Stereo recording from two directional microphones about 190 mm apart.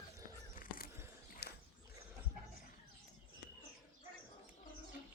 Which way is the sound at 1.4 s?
60° left (ahead or behind).